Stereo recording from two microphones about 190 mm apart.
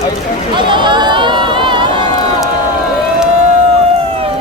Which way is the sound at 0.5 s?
25° right (ahead or behind).